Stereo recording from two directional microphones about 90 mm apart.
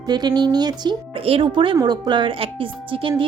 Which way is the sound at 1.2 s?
80° right.